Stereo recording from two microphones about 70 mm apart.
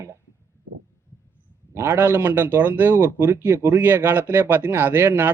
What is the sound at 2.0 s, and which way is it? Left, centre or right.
Speech, right.